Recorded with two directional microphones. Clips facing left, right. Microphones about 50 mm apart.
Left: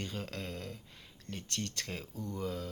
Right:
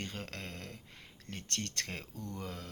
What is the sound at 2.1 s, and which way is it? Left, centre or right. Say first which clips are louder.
Speech: left 3 dB; centre.